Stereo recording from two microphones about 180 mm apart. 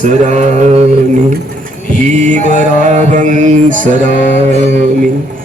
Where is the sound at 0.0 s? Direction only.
40° right (ahead or behind).